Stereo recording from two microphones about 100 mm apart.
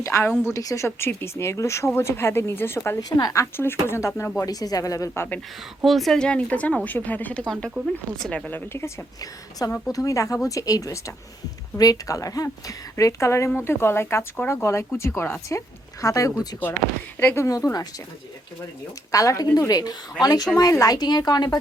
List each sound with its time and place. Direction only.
0.0 s speech: 25° left (ahead or behind)
3.0 s speech: 40° left (ahead or behind)
4.4 s speech: 40° left (ahead or behind)
5.8 s speech: centre (ahead or behind)
8.4 s speech: 20° left (ahead or behind)
9.8 s speech: 35° left (ahead or behind)
17.2 s speech: 25° left (ahead or behind)
19.1 s speech: 35° left (ahead or behind)